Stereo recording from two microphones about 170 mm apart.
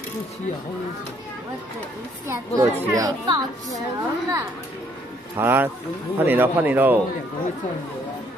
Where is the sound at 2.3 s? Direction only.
20° right (ahead or behind).